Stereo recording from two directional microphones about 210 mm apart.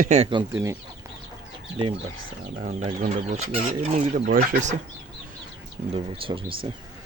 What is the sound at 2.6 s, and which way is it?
Speech, 35° right (ahead or behind).